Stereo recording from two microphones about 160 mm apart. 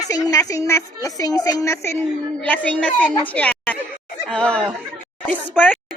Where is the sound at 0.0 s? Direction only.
20° left (ahead or behind).